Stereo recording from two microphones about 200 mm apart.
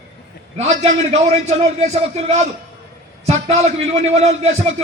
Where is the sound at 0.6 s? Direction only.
35° right (ahead or behind).